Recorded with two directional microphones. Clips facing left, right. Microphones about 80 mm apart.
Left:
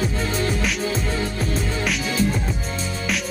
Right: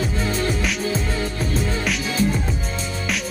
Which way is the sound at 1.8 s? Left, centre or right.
Centre.